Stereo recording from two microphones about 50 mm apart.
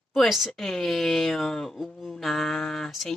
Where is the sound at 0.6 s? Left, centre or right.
Centre.